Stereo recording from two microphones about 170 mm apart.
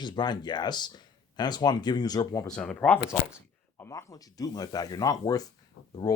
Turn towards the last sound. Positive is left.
turn(degrees=90)